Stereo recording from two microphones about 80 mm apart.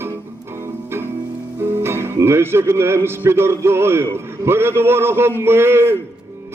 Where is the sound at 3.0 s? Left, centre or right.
Right.